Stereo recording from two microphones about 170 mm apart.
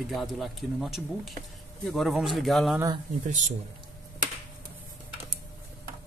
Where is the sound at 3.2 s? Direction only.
45° right (ahead or behind).